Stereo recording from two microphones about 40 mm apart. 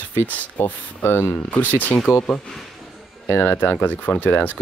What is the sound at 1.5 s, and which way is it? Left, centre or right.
Speech, left.